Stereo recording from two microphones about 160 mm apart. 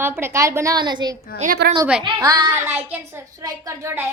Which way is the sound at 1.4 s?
75° right (ahead or behind).